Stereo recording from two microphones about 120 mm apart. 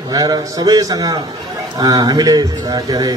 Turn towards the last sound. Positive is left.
turn(degrees=-30)  # may be behind; listen again after turning